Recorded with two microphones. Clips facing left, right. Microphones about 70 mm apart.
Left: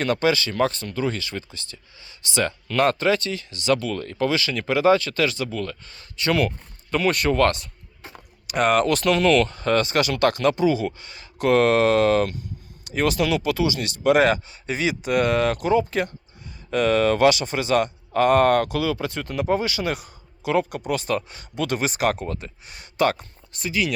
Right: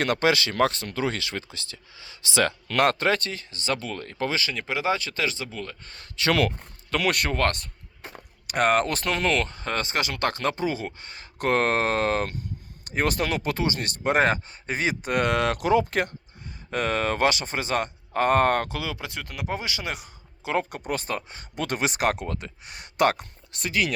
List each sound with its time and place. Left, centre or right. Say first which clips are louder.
0.0 s speech: left 1 dB; right
4.4 s speech: left 5 dB; centre
5.8 s speech: even; right
6.1 s speech: left 1 dB; right
6.9 s speech: left 4 dB; right
7.3 s speech: left 5 dB; right
16.7 s speech: left 6 dB; right; by 19.2 s centre
19.2 s speech: left 8 dB; centre
19.5 s speech: left 7 dB; centre; by 21.4 s right
21.5 s speech: left 3 dB; right